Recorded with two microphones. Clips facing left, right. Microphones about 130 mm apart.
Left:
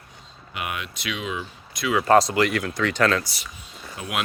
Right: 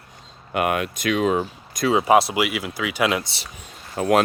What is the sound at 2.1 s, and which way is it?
Speech, 5° right (ahead or behind).